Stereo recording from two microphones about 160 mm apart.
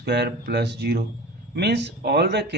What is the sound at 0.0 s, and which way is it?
Speech, 90° right.